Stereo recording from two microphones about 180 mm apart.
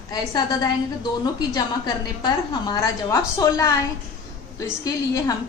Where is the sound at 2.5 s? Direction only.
25° left (ahead or behind).